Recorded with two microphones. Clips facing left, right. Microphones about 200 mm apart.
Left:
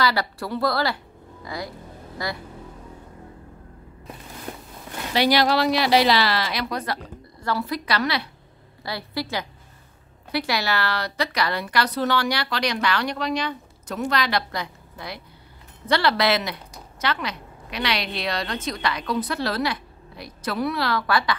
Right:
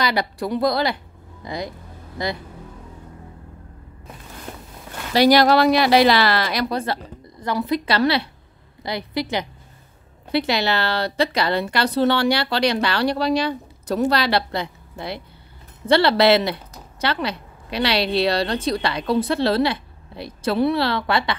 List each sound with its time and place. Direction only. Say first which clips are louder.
0.0 s a woman's voice: right 2 dB; 20° right (ahead or behind)
5.1 s speech: right 5 dB; 40° right (ahead or behind)
6.7 s a woman's voice: right 4 dB; 30° right (ahead or behind)